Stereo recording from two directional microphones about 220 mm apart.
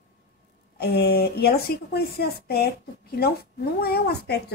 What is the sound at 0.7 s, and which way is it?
A woman's voice, 45° left (ahead or behind).